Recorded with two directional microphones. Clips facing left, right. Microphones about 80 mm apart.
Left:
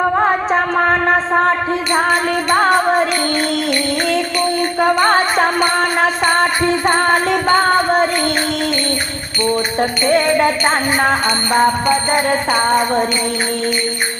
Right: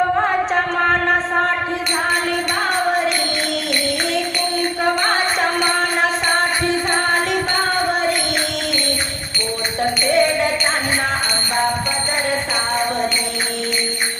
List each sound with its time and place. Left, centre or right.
0.5 s a sound: left
4.9 s music: left
6.8 s music: left
11.0 s music: left